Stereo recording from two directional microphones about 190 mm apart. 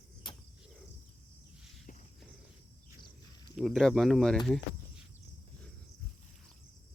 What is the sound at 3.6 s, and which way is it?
Speech, centre (ahead or behind).